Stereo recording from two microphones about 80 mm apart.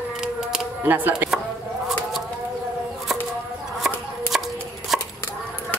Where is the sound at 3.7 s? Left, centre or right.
Centre.